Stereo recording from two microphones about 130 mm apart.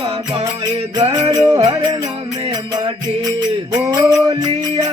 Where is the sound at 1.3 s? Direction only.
30° right (ahead or behind).